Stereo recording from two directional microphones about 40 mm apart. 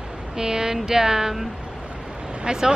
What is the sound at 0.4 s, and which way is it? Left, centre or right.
Speech, centre.